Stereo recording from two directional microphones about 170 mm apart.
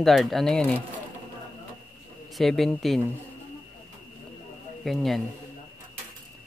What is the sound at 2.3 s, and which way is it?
Speech, centre (ahead or behind).